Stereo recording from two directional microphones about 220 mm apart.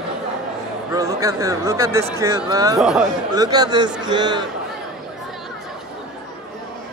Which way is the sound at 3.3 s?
15° right (ahead or behind).